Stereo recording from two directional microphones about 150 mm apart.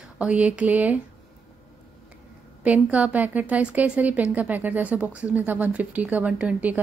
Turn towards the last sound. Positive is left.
turn(degrees=-10)  # may be behind; listen again after turning